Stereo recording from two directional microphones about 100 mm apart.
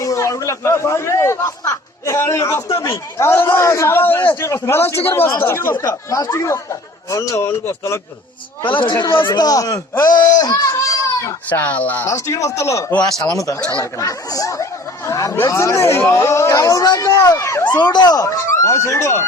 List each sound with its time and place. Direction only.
0.0 s a man's voice: 35° left (ahead or behind)
6.1 s speech: 30° left (ahead or behind)
8.6 s speech: 55° left (ahead or behind); by 9.8 s 40° left (ahead or behind)
10.2 s a sound: 40° left (ahead or behind)
11.4 s speech: 15° left (ahead or behind)
12.0 s speech: 30° left (ahead or behind)
17.7 s speech: 45° left (ahead or behind); by 19.2 s 30° left (ahead or behind)